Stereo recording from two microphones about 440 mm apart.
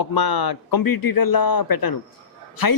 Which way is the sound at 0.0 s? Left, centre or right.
Left.